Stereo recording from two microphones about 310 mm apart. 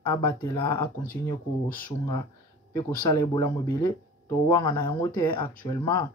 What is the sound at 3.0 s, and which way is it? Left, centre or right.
Speech, centre.